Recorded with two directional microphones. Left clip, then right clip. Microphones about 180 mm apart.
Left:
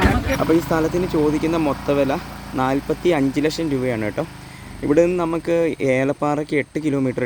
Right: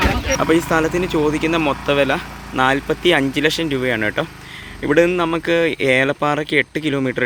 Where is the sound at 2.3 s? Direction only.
55° left (ahead or behind).